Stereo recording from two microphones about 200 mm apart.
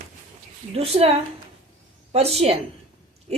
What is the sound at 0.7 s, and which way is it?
Speech, 30° right (ahead or behind).